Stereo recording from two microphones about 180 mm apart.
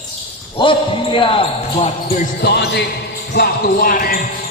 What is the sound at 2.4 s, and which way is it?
Speech, 70° left (ahead or behind).